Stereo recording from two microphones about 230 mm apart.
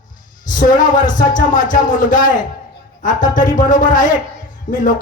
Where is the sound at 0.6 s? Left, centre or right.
Left.